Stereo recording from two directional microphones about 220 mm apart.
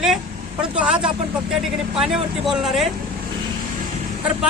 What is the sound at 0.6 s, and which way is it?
Speech, 5° right (ahead or behind).